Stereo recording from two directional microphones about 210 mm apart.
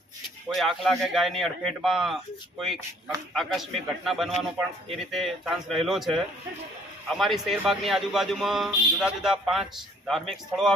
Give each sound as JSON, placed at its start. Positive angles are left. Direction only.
{"t": 0.5, "sound": "a man's voice", "side_deg": 0}
{"t": 3.3, "sound": "a man's voice", "side_deg": 0}